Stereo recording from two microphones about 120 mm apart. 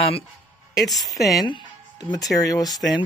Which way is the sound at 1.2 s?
30° left (ahead or behind).